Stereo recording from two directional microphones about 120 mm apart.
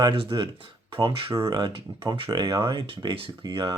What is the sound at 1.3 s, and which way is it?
Speech, 30° right (ahead or behind).